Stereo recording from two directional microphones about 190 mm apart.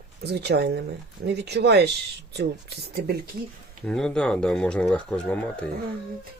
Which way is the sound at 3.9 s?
5° left (ahead or behind).